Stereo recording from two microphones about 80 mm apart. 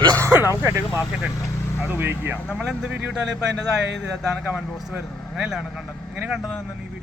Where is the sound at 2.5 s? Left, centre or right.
Centre.